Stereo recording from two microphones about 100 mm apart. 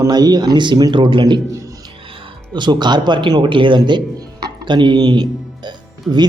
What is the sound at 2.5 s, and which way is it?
A man's voice, 45° right (ahead or behind).